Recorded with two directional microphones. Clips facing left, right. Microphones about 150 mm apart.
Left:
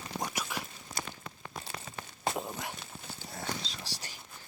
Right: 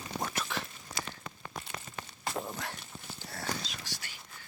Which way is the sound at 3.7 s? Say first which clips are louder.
Left 1 dB; 35° left (ahead or behind).